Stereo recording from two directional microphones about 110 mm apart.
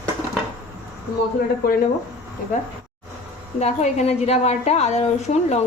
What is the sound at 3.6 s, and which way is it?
A woman's voice, 85° left.